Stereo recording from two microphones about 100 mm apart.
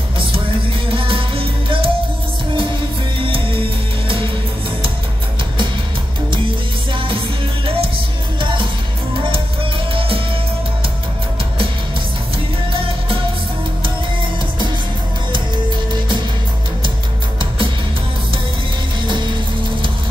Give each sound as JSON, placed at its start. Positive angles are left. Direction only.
{"t": 0.8, "sound": "music", "side_deg": -65}
{"t": 3.2, "sound": "music", "side_deg": -65}
{"t": 6.3, "sound": "music", "side_deg": -60}